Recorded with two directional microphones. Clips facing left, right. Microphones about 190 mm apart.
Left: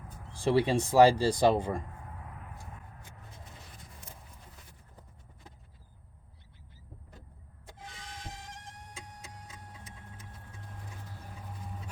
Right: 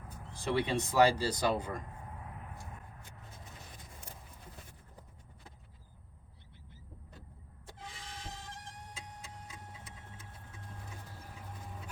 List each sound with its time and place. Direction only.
0.4 s speech: 30° left (ahead or behind)